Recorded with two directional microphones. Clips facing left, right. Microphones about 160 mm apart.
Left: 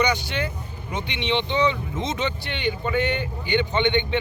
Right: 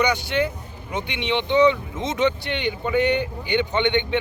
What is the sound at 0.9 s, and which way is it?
Speech, 10° right (ahead or behind).